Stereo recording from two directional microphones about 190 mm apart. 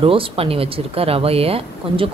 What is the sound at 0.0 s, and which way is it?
Speech, 30° right (ahead or behind).